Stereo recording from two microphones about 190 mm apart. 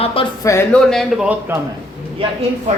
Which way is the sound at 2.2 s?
30° right (ahead or behind).